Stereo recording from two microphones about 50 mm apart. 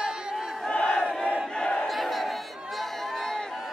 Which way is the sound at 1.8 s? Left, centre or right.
Centre.